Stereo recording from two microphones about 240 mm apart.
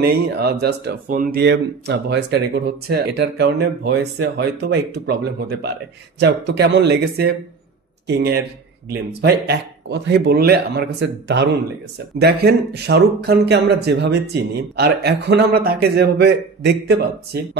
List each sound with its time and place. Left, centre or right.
0.0 s speech: right
6.2 s speech: right